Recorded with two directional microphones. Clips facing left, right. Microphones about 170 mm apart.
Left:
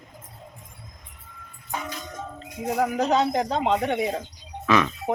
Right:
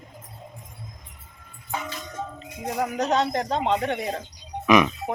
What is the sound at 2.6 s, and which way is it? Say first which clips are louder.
Speech: left 2 dB; centre (ahead or behind).